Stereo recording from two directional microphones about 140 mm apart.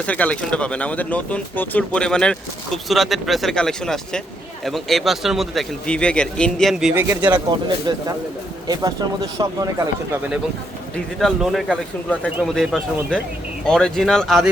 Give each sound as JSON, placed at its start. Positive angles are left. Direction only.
{"t": 0.0, "sound": "speech", "side_deg": 10}
{"t": 7.2, "sound": "a man's voice", "side_deg": -35}
{"t": 10.9, "sound": "speech", "side_deg": 0}
{"t": 13.7, "sound": "speech", "side_deg": 5}